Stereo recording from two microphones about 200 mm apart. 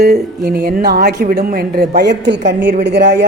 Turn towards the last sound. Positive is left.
turn(degrees=-55)  # may be behind; listen again after turning